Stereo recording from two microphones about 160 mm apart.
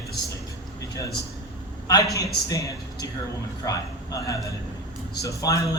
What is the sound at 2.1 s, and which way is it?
A man's voice, 20° left (ahead or behind).